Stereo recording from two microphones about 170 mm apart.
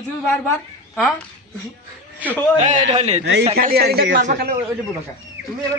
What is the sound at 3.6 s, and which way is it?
Speech, 65° right (ahead or behind).